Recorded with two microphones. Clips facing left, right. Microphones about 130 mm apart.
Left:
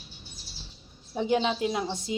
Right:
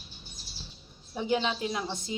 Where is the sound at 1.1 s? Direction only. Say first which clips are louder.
Left 3 dB; 20° left (ahead or behind).